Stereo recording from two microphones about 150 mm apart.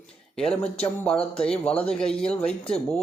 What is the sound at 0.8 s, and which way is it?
Speech, 5° left (ahead or behind).